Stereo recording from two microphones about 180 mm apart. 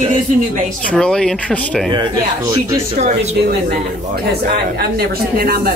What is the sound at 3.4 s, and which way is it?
Speech, 60° right (ahead or behind).